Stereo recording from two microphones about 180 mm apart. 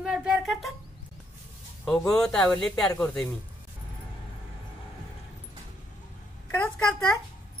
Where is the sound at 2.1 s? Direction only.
5° left (ahead or behind).